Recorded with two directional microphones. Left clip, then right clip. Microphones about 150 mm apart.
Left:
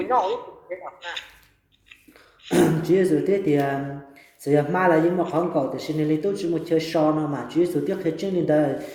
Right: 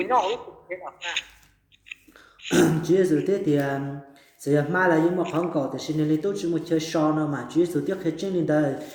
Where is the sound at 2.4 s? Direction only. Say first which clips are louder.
Even; 25° right (ahead or behind).